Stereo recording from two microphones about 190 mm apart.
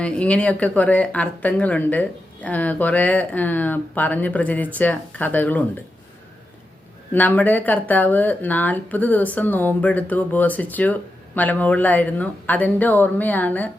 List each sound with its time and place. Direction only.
0.0 s speech: 5° left (ahead or behind)
7.1 s speech: 10° left (ahead or behind)